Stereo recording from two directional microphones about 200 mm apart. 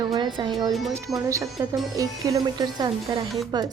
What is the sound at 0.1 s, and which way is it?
A woman's voice, 20° right (ahead or behind).